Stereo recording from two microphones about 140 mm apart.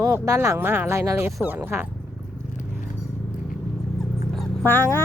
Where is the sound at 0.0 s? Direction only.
20° right (ahead or behind).